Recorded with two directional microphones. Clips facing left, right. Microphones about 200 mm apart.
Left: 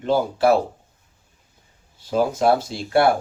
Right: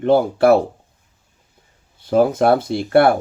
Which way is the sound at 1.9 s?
55° right (ahead or behind).